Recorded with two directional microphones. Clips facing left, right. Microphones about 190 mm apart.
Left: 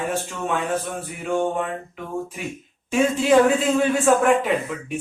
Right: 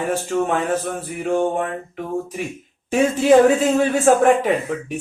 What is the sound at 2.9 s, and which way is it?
Speech, 45° right (ahead or behind).